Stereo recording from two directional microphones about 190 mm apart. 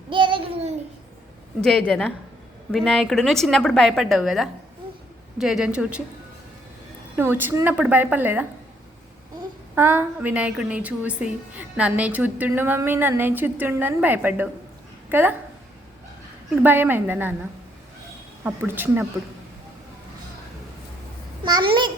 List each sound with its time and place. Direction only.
0.1 s a sound: 25° right (ahead or behind)
1.6 s a woman's voice: 5° left (ahead or behind)
7.2 s a woman's voice: 10° right (ahead or behind)
9.7 s a woman's voice: 10° right (ahead or behind)
16.6 s a woman's voice: 10° right (ahead or behind)
18.4 s a woman's voice: 10° right (ahead or behind)
21.4 s babbling: 25° right (ahead or behind)